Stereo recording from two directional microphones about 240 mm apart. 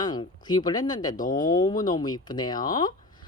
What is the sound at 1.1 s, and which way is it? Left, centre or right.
Speech, left.